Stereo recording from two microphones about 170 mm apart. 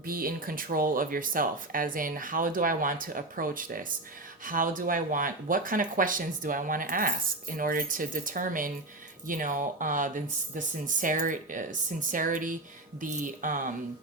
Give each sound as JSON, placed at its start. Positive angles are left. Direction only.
{"t": 0.0, "sound": "speech", "side_deg": -55}